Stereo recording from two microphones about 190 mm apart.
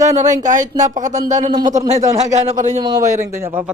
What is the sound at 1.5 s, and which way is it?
Speech, 20° right (ahead or behind).